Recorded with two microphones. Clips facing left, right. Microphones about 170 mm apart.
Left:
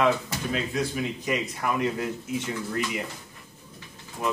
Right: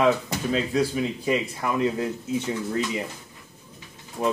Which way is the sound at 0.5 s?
30° right (ahead or behind).